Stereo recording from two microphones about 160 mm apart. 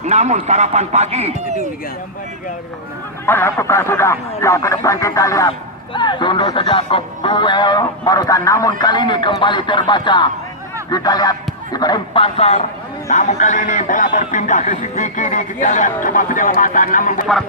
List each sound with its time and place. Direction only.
0.0 s speech: 45° right (ahead or behind)
3.2 s a man's voice: 15° left (ahead or behind); by 17.2 s 55° left (ahead or behind)